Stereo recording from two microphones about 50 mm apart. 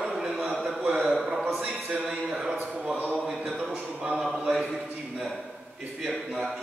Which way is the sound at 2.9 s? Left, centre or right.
Right.